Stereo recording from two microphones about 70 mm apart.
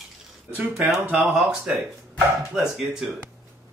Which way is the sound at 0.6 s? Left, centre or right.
Right.